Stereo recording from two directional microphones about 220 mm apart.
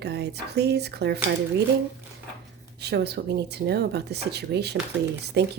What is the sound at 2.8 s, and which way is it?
A woman's voice, 50° right (ahead or behind).